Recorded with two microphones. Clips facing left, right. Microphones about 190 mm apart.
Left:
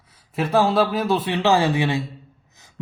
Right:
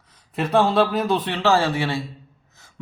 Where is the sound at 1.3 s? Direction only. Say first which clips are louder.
Left 2 dB; 15° left (ahead or behind).